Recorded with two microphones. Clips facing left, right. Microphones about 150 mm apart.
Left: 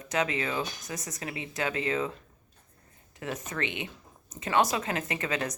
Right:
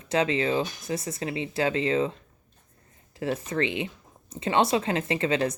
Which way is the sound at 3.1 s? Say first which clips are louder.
Right 7 dB; 30° right (ahead or behind).